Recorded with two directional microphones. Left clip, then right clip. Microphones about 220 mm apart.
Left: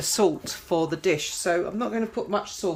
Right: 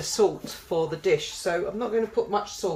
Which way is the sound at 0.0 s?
50° left (ahead or behind).